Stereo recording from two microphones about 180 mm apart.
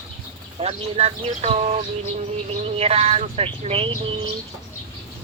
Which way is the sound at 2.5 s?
35° right (ahead or behind).